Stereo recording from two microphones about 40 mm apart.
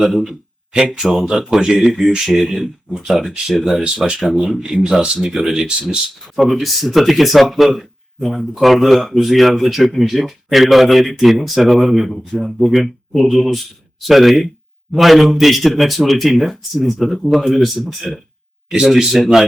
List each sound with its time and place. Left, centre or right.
0.0 s speech: centre
1.3 s speech: centre
3.8 s speech: right
4.4 s speech: centre
4.8 s speech: centre
6.2 s speech: centre